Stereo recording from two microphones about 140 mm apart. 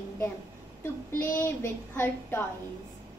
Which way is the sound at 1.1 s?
15° left (ahead or behind).